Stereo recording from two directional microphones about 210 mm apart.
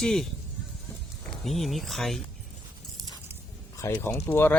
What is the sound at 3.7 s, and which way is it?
Speech, 10° left (ahead or behind).